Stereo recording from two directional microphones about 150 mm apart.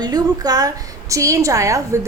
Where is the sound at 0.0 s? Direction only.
25° right (ahead or behind).